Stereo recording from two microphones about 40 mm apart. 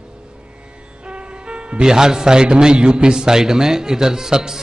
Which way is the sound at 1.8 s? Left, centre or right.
Centre.